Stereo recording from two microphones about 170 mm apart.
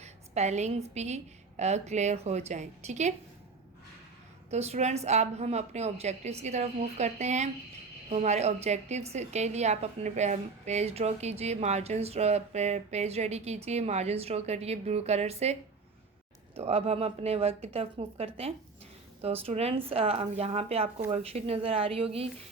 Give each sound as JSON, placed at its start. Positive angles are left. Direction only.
{"t": 0.0, "sound": "a woman's voice", "side_deg": -40}
{"t": 4.5, "sound": "a woman's voice", "side_deg": -40}
{"t": 16.6, "sound": "a woman's voice", "side_deg": -40}